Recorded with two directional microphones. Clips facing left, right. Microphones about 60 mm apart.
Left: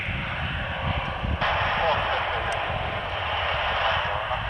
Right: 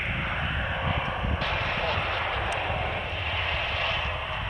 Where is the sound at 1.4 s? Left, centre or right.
Left.